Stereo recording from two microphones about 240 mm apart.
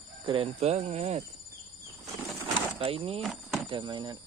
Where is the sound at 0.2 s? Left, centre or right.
Right.